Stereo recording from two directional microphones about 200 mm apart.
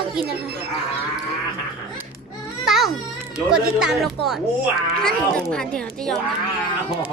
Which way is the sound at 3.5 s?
5° right (ahead or behind).